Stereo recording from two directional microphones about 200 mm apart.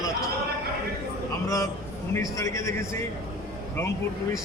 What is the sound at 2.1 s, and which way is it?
Speech, 15° left (ahead or behind).